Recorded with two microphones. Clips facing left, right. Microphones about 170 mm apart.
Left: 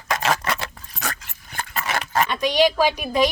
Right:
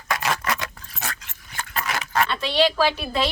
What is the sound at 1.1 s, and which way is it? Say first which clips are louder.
Dog: left 6 dB; 55° left (ahead or behind).